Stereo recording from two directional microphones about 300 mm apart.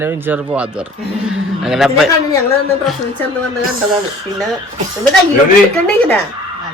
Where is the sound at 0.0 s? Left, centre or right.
Centre.